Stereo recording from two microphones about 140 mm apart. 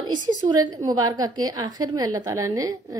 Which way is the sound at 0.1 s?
30° right (ahead or behind).